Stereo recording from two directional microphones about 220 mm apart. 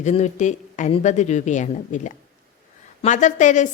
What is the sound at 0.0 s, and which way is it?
A woman's voice, 30° left (ahead or behind).